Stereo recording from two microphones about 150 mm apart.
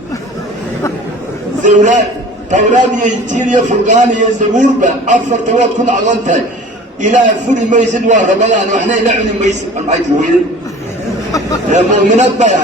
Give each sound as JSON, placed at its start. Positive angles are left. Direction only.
{"t": 1.6, "sound": "a man's voice", "side_deg": -55}
{"t": 11.7, "sound": "a man's voice", "side_deg": -55}